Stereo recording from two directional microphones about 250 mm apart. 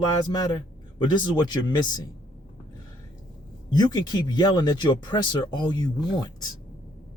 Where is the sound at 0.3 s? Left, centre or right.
Centre.